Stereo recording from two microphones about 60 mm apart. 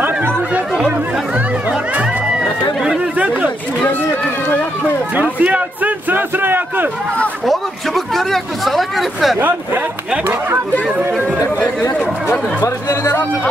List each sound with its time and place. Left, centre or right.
1.7 s music: centre
3.2 s chatter: right
3.8 s run: left
5.4 s a sound: right
7.4 s a sound: centre
12.6 s chatter: left